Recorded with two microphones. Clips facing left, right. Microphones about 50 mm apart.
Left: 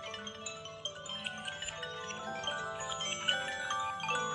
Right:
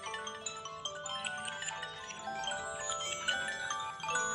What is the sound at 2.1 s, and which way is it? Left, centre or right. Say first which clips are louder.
Music: right 1 dB; centre.